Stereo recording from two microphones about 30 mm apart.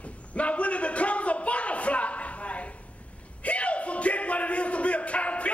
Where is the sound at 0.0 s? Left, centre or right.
Left.